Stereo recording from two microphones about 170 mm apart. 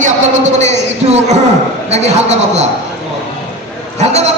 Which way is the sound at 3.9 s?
40° right (ahead or behind).